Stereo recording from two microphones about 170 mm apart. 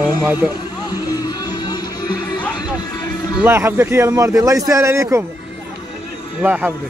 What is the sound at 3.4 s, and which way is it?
A man's voice, 15° right (ahead or behind).